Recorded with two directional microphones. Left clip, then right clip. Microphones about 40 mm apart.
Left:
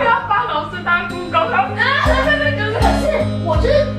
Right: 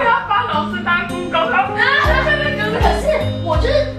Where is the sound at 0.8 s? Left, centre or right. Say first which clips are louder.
Even; centre.